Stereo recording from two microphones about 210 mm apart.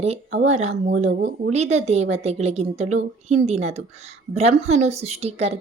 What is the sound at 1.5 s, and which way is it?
A woman's voice, 30° right (ahead or behind).